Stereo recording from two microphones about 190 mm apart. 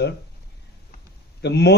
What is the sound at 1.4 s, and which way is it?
Speech, 60° left (ahead or behind).